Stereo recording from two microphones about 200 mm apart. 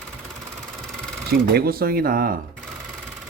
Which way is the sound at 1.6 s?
50° right (ahead or behind).